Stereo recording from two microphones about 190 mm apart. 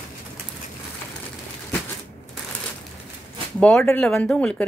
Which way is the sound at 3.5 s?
5° left (ahead or behind).